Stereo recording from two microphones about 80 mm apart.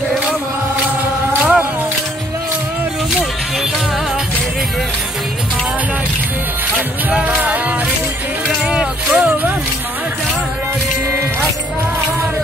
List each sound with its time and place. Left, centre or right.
1.4 s music: centre
7.1 s music: centre